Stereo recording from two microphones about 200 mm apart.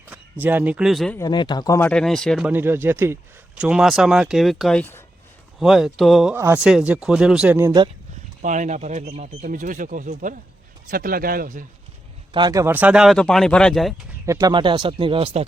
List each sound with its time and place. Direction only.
0.1 s speech: 10° right (ahead or behind)
1.2 s speech: 20° left (ahead or behind)
1.9 s speech: 5° left (ahead or behind)
2.5 s speech: 10° right (ahead or behind); by 5.0 s 10° left (ahead or behind)
5.5 s speech: centre (ahead or behind)
8.4 s speech: 40° right (ahead or behind)
12.3 s speech: 20° right (ahead or behind); by 13.9 s centre (ahead or behind)
14.3 s speech: 20° right (ahead or behind)